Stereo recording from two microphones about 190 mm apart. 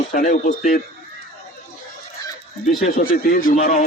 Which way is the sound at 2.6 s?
45° left (ahead or behind).